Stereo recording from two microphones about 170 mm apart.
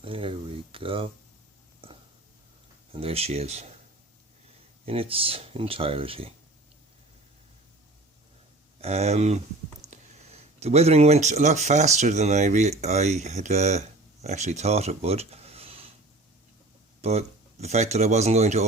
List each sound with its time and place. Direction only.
0.0 s speech: 30° right (ahead or behind)
2.9 s speech: 35° right (ahead or behind)
4.9 s speech: 35° right (ahead or behind)
8.8 s speech: 40° right (ahead or behind)
10.6 s speech: 40° right (ahead or behind)
17.0 s speech: 40° right (ahead or behind)